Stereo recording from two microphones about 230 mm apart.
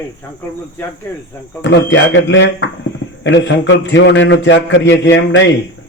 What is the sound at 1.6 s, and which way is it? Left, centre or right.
A man's voice, left.